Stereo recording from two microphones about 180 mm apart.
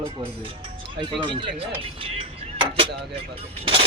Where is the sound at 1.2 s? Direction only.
30° right (ahead or behind).